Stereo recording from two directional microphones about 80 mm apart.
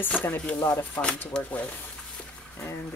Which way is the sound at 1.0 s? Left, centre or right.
Centre.